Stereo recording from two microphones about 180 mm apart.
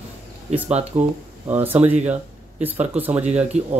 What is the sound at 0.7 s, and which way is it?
Speech, 35° right (ahead or behind).